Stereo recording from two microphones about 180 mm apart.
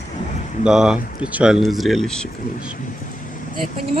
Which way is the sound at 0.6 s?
5° right (ahead or behind).